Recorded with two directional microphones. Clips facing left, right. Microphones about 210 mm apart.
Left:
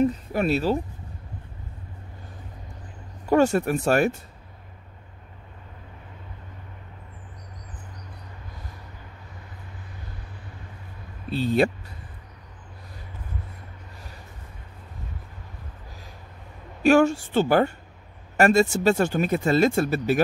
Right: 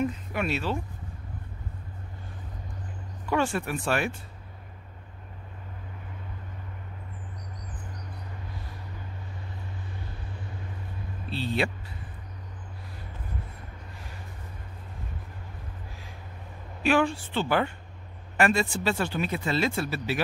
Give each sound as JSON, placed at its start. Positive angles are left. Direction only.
{"t": 0.0, "sound": "speech", "side_deg": 35}
{"t": 3.3, "sound": "speech", "side_deg": 40}
{"t": 11.2, "sound": "speech", "side_deg": 45}
{"t": 16.8, "sound": "speech", "side_deg": 45}